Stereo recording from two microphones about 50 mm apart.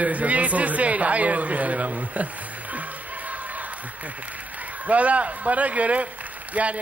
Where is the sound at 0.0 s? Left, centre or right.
Right.